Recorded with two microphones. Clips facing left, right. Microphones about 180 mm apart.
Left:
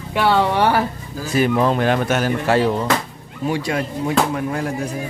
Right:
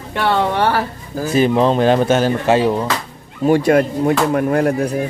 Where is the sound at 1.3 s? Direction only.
25° right (ahead or behind).